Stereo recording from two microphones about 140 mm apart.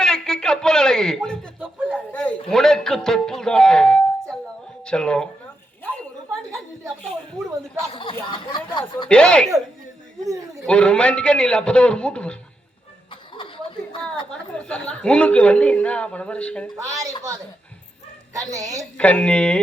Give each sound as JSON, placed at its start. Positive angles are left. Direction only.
{"t": 0.0, "sound": "a sound", "side_deg": 5}
{"t": 1.9, "sound": "a man's voice", "side_deg": 10}
{"t": 5.8, "sound": "a sound", "side_deg": 10}
{"t": 8.3, "sound": "speech", "side_deg": 35}
{"t": 9.0, "sound": "a woman's voice", "side_deg": 5}
{"t": 10.7, "sound": "a woman's voice", "side_deg": 5}
{"t": 13.1, "sound": "chuckle", "side_deg": 35}
{"t": 14.3, "sound": "a woman's voice", "side_deg": 5}
{"t": 16.7, "sound": "a woman's voice", "side_deg": -25}
{"t": 18.3, "sound": "a woman's voice", "side_deg": -25}
{"t": 18.9, "sound": "a woman's voice", "side_deg": 10}